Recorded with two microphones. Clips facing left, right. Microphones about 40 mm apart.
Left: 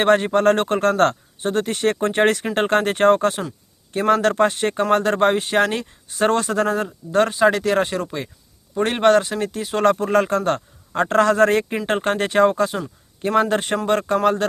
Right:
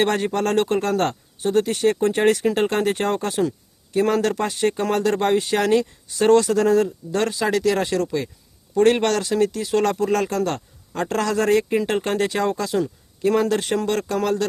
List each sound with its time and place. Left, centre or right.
0.0 s a man's voice: left